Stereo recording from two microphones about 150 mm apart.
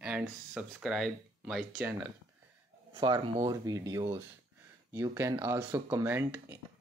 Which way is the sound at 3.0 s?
30° right (ahead or behind).